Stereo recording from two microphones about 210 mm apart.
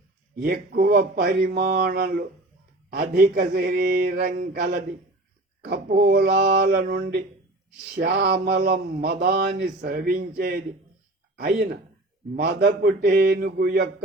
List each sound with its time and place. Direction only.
0.4 s a man's voice: 45° right (ahead or behind)
5.6 s a man's voice: 50° right (ahead or behind)